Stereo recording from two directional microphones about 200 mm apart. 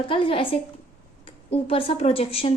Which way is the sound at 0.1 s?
25° left (ahead or behind).